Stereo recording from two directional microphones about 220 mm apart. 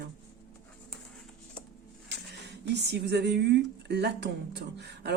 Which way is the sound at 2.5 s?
50° right (ahead or behind).